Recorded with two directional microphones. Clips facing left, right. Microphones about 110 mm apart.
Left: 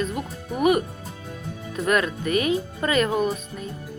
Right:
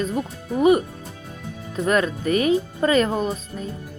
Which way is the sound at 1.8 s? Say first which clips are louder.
Right 2 dB; 35° right (ahead or behind).